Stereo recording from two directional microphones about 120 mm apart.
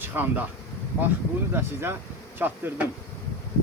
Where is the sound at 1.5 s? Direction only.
20° right (ahead or behind).